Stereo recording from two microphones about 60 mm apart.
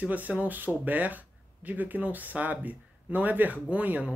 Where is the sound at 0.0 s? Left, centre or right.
Right.